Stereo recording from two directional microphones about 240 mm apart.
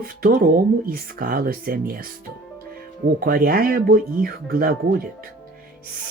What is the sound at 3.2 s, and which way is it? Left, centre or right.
Speech, right.